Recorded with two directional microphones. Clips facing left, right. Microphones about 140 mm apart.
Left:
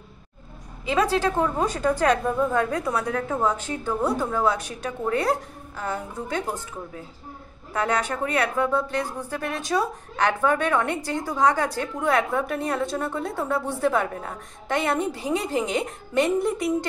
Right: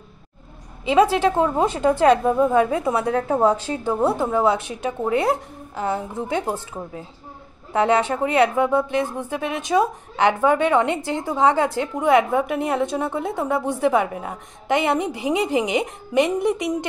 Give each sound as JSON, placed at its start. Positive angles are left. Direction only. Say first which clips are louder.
{"t": 0.8, "sound": "speech", "louder": "right 5 dB", "side_deg": -20}
{"t": 7.7, "sound": "speech", "louder": "right 6 dB", "side_deg": -25}